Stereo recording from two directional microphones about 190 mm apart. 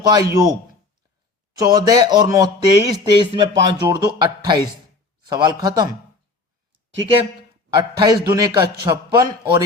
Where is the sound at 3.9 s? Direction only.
25° right (ahead or behind).